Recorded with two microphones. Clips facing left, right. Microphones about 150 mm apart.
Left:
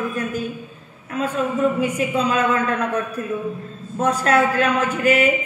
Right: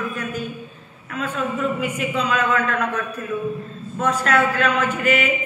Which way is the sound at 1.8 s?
40° left (ahead or behind).